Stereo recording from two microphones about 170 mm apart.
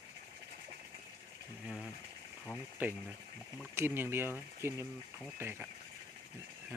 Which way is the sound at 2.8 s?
10° right (ahead or behind).